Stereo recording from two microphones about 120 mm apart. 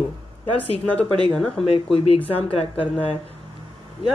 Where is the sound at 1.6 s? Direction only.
55° left (ahead or behind).